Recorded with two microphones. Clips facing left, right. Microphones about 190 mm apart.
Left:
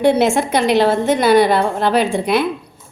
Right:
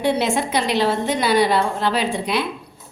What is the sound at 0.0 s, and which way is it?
A woman's voice, 50° left (ahead or behind).